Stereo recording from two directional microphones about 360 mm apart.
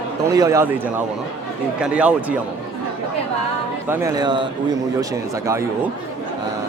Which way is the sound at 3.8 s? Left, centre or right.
Centre.